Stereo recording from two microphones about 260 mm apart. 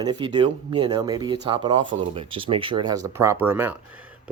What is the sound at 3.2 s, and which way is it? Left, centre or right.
Speech, centre.